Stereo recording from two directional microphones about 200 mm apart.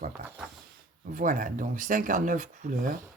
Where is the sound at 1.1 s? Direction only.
40° right (ahead or behind).